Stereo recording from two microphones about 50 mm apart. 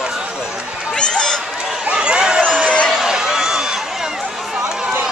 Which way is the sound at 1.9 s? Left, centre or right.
Centre.